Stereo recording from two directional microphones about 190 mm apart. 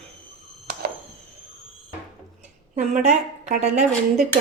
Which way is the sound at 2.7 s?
40° right (ahead or behind).